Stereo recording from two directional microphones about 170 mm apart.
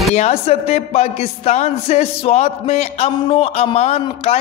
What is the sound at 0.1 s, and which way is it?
Speech, 40° left (ahead or behind).